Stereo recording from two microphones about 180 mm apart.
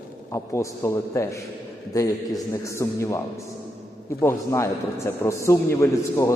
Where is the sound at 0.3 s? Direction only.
15° left (ahead or behind).